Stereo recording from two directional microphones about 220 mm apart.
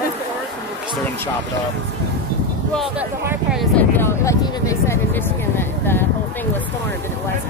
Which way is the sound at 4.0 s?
10° left (ahead or behind).